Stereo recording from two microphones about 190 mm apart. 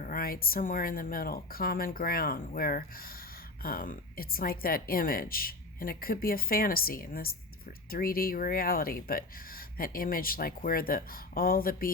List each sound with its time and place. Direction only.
0.0 s speech: 50° left (ahead or behind)